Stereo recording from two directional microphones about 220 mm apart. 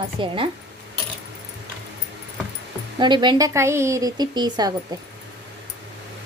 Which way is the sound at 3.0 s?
20° right (ahead or behind).